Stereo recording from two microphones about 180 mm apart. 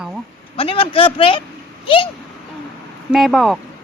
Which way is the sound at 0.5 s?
30° left (ahead or behind).